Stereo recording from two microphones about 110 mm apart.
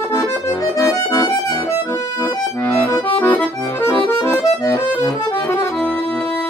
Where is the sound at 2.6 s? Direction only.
25° left (ahead or behind).